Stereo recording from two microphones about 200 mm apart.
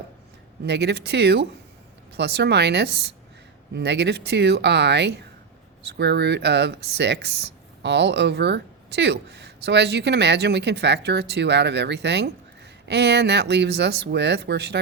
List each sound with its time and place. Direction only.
0.6 s speech: 55° right (ahead or behind)